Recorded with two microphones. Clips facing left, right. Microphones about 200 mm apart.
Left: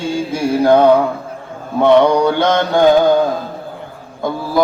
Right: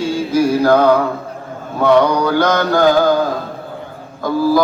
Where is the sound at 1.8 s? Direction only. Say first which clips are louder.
Left 2 dB; 25° left (ahead or behind).